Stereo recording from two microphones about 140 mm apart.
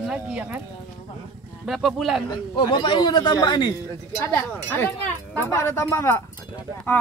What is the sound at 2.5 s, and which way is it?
A man's voice, 35° left (ahead or behind).